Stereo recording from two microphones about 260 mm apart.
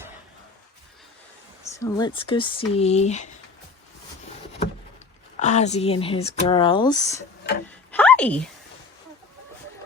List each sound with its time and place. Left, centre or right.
1.8 s speech: centre
5.4 s speech: left
7.9 s a sound: centre